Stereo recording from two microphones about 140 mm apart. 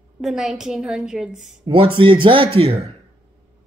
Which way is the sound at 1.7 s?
40° right (ahead or behind).